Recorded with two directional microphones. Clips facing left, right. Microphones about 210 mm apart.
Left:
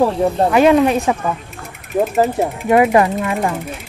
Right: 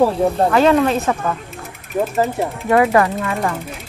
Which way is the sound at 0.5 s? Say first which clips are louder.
Left 4 dB; 15° left (ahead or behind).